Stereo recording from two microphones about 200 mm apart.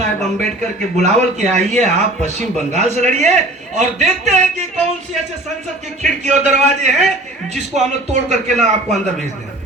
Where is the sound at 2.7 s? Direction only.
35° right (ahead or behind).